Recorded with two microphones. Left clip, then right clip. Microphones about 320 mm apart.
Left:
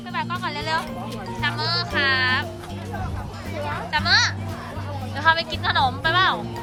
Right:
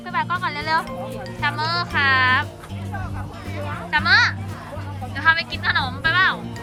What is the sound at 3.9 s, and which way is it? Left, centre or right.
A child's voice, centre.